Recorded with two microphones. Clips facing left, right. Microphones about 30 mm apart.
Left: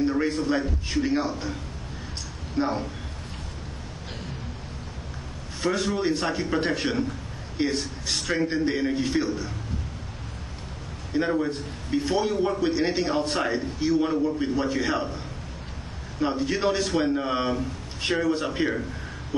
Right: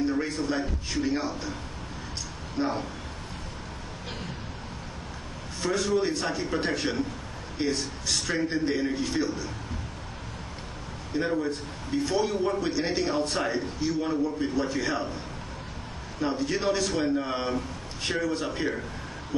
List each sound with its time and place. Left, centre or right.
0.0 s a man's voice: centre
2.5 s speech: centre
5.6 s a man's voice: centre
11.1 s a man's voice: centre
12.6 s a man's voice: centre
13.0 s a man's voice: left
16.2 s a man's voice: centre